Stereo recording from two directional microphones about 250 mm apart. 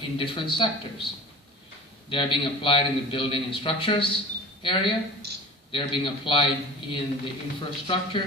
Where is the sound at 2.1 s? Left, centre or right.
Centre.